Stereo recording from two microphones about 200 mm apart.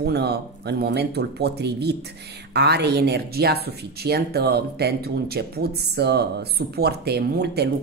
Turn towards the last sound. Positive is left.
turn(degrees=-55)  # may be behind; listen again after turning